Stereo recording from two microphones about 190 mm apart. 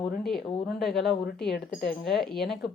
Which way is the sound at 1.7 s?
55° left (ahead or behind).